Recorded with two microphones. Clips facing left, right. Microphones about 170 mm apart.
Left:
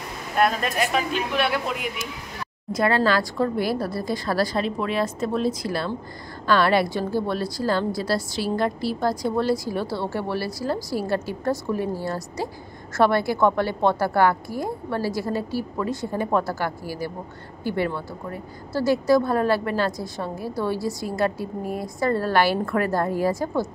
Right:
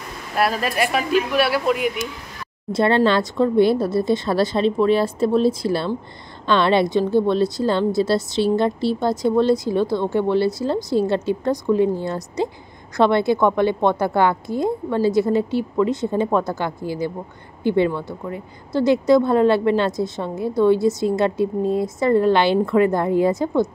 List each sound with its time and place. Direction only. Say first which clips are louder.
1.3 s speech: right 5 dB; 5° right (ahead or behind)
2.7 s a woman's voice: right 4 dB; 25° right (ahead or behind)